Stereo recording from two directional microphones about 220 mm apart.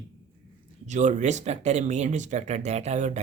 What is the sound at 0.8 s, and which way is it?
Speech, 35° right (ahead or behind).